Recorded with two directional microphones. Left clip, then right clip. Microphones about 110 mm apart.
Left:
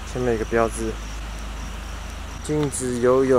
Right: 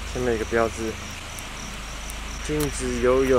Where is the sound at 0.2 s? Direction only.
30° left (ahead or behind).